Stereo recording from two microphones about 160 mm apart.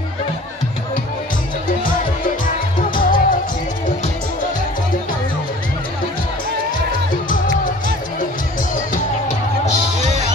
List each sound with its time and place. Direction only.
2.9 s music: 60° left (ahead or behind)
7.2 s music: 55° left (ahead or behind)